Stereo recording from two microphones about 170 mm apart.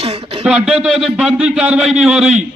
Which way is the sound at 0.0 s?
35° right (ahead or behind).